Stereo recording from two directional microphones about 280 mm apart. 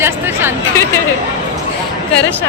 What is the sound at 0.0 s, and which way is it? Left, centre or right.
Chatter, centre.